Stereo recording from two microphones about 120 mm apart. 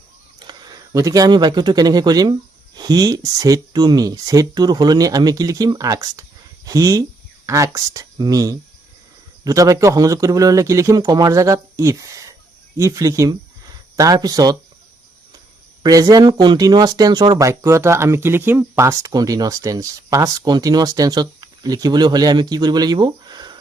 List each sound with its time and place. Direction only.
0.3 s a man's voice: 35° right (ahead or behind)
15.8 s speech: 30° right (ahead or behind)
17.3 s speech: 25° right (ahead or behind)